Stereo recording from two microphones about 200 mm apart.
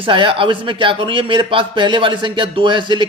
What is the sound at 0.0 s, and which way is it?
A man's voice, 25° right (ahead or behind).